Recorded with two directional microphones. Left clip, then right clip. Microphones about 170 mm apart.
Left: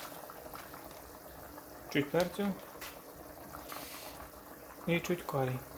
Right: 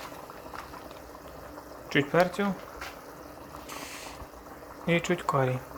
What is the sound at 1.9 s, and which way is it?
Speech, 5° left (ahead or behind).